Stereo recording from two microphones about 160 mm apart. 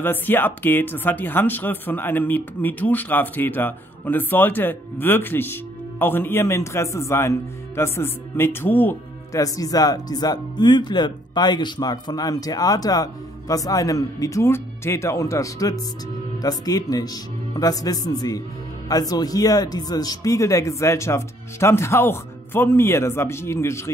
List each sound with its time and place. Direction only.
0.0 s speech: 10° left (ahead or behind)